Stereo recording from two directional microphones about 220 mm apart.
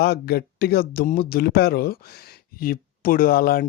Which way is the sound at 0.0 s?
45° left (ahead or behind).